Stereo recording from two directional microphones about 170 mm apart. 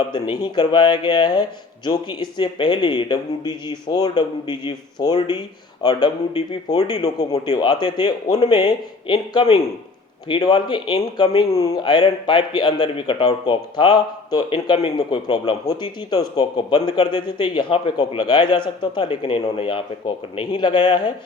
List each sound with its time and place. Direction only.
0.4 s speech: 25° left (ahead or behind)
11.3 s speech: 20° left (ahead or behind)